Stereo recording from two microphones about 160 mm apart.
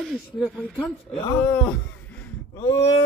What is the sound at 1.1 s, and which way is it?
Speech, 30° left (ahead or behind).